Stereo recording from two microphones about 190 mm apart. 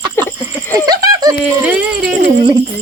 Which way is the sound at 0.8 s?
20° right (ahead or behind).